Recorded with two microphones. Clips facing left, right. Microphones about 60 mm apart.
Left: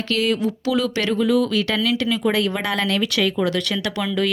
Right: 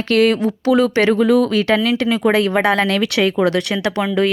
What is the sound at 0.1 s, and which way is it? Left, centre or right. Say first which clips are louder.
Speech: right 7 dB; right.